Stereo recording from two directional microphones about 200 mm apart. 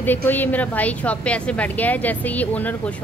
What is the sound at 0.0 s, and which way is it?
A woman's voice, 10° left (ahead or behind).